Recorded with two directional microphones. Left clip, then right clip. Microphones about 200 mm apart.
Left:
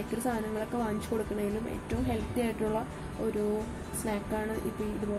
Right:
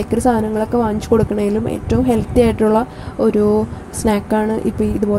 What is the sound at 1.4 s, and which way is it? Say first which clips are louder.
A woman's voice: right 15 dB; 30° right (ahead or behind).